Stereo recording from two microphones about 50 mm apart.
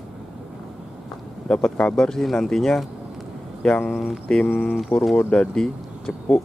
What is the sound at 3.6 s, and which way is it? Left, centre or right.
Speech, centre.